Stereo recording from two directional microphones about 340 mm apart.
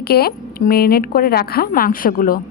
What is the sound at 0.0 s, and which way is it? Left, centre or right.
A woman's voice, left.